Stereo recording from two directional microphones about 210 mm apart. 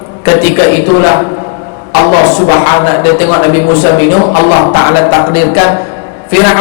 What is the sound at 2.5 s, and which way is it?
A man's voice, 25° left (ahead or behind).